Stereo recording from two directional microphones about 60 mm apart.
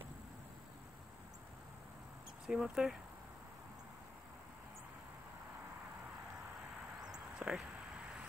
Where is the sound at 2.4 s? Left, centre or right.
Centre.